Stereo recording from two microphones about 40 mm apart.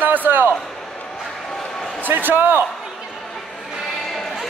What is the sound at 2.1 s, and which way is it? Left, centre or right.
Speech, right.